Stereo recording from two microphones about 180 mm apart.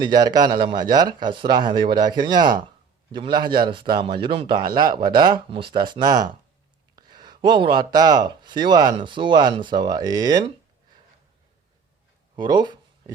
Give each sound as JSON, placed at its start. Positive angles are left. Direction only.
{"t": 0.0, "sound": "speech", "side_deg": -25}
{"t": 12.4, "sound": "speech", "side_deg": -25}